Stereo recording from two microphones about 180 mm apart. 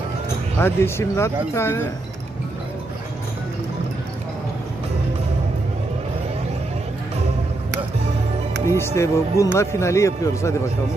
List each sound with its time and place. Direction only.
0.6 s speech: 15° left (ahead or behind)
8.6 s speech: 15° left (ahead or behind)